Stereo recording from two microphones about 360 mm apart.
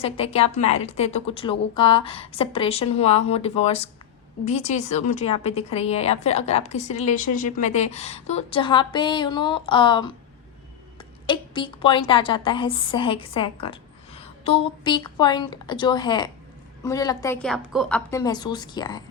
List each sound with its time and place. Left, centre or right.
0.0 s a woman's voice: centre
11.3 s a woman's voice: centre